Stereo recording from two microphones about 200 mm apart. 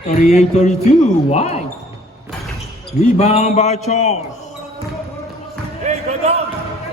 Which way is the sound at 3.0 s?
35° left (ahead or behind).